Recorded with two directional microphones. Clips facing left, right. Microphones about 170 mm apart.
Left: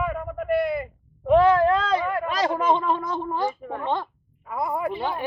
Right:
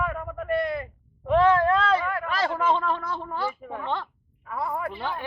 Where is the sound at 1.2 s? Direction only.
15° left (ahead or behind).